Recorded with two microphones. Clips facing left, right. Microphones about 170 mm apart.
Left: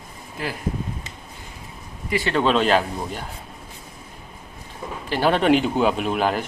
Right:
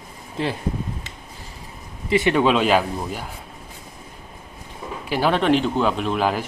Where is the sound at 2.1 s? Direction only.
20° right (ahead or behind).